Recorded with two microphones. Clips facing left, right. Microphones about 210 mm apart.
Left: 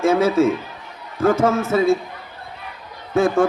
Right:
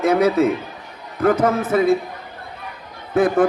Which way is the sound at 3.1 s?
25° left (ahead or behind).